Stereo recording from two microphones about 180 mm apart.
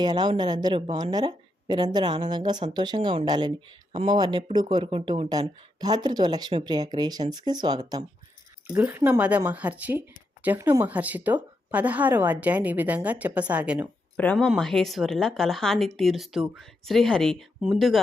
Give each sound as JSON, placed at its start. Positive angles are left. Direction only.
{"t": 0.0, "sound": "a woman's voice", "side_deg": -25}
{"t": 8.6, "sound": "a woman's voice", "side_deg": -10}